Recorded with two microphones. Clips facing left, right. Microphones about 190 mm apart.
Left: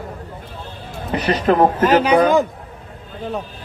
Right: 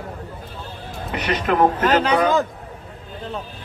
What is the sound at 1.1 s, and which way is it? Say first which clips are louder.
Speech: left 5 dB; 35° left (ahead or behind).